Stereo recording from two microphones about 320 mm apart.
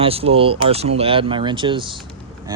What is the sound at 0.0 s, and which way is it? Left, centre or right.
Speech, centre.